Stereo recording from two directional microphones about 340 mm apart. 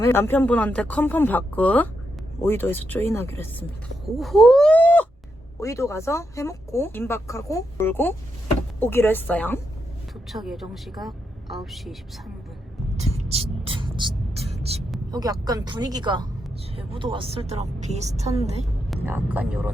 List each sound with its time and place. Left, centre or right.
0.0 s speech: centre
4.2 s a sound: centre
5.5 s speech: centre
13.0 s music: centre
15.1 s speech: centre
19.0 s speech: centre